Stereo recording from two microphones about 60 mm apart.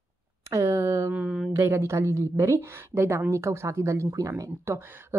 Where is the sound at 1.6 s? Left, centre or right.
Right.